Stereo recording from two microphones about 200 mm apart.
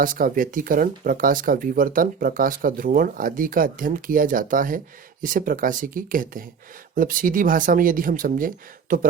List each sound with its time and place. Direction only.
0.0 s speech: 45° right (ahead or behind)